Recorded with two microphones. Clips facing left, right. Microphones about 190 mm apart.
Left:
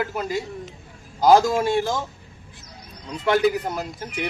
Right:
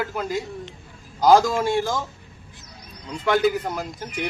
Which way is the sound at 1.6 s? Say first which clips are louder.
Left 1 dB; 20° left (ahead or behind).